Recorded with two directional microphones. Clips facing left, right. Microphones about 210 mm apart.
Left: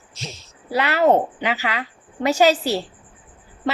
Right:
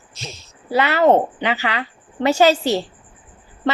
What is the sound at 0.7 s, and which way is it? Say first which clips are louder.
Speech: right 2 dB; centre (ahead or behind).